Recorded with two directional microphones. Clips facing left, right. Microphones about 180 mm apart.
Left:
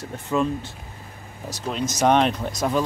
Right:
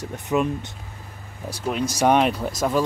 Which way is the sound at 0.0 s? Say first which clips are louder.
Right 1 dB; 15° right (ahead or behind).